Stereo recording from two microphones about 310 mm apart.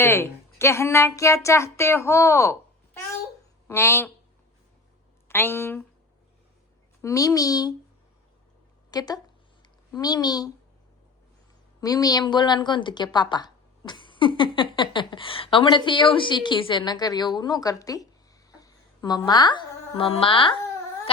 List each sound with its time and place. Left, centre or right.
0.0 s speech: centre
5.3 s speech: centre
7.0 s speech: centre
8.9 s speech: centre
11.8 s a woman's voice: centre